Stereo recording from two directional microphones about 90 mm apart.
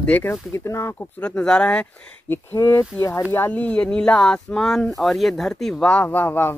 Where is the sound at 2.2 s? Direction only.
25° left (ahead or behind).